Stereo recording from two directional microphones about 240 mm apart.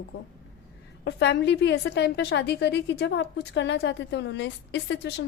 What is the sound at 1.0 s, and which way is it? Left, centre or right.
A woman's voice, left.